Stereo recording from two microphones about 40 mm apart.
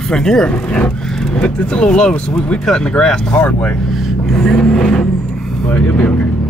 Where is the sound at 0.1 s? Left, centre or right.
Centre.